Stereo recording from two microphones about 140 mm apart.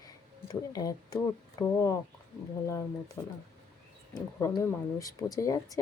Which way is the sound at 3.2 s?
15° left (ahead or behind).